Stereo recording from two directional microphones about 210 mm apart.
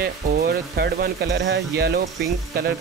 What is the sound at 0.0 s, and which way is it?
Speech, 45° right (ahead or behind).